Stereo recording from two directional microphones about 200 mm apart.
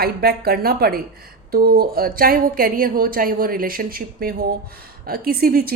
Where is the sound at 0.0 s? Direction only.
50° right (ahead or behind).